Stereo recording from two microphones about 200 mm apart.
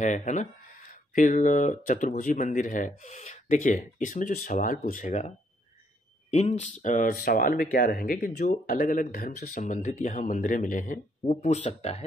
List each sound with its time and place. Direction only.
0.0 s speech: 40° left (ahead or behind)
6.3 s speech: 35° left (ahead or behind)